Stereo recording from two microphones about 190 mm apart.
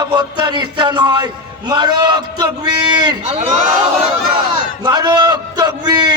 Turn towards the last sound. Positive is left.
turn(degrees=-20)  # may be behind; listen again after turning